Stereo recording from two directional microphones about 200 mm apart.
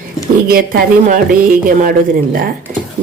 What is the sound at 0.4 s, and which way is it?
Speech, 45° right (ahead or behind).